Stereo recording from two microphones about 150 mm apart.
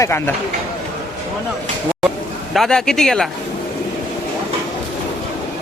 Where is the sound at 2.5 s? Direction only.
Centre (ahead or behind).